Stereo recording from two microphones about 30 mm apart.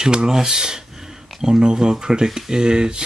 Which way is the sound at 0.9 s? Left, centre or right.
Centre.